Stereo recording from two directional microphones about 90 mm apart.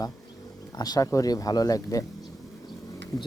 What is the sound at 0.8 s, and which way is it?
Speech, 45° left (ahead or behind).